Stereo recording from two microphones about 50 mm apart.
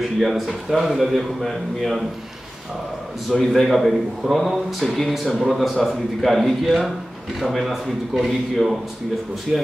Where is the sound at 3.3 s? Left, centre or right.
Centre.